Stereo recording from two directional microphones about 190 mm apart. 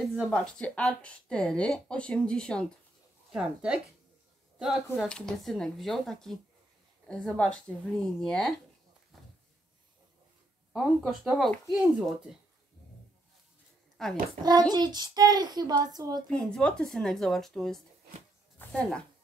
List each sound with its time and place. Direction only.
0.2 s speech: 5° left (ahead or behind)
4.9 s speech: 5° left (ahead or behind)
10.7 s speech: 5° right (ahead or behind)
14.0 s a child's voice: centre (ahead or behind)
14.4 s a child's voice: 20° right (ahead or behind)
16.3 s speech: 5° left (ahead or behind)